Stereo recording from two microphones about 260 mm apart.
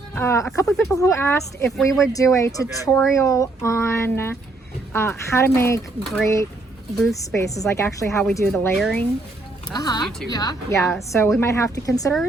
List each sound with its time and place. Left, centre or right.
0.1 s speech: centre
1.7 s speech: centre
2.0 s speech: centre
7.3 s speech: centre
9.7 s speech: centre